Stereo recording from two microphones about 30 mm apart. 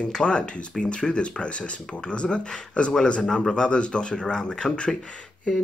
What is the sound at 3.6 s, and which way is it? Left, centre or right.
Speech, left.